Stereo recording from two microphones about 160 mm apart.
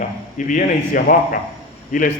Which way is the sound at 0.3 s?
55° left (ahead or behind).